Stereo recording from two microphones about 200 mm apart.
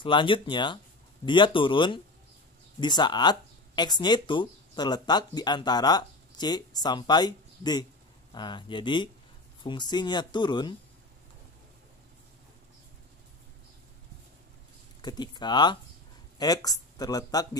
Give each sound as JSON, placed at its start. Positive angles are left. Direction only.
{"t": 0.0, "sound": "speech", "side_deg": 25}
{"t": 15.0, "sound": "speech", "side_deg": 20}